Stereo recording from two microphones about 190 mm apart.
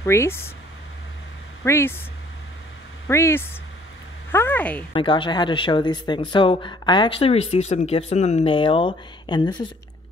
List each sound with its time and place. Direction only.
0.0 s speech: 15° left (ahead or behind)
1.6 s speech: 10° left (ahead or behind)
3.1 s speech: 15° left (ahead or behind)
4.9 s speech: 25° left (ahead or behind)